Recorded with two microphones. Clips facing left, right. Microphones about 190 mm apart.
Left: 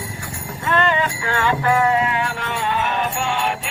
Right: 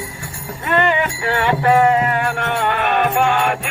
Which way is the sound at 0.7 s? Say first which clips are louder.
Right 2 dB; 15° right (ahead or behind).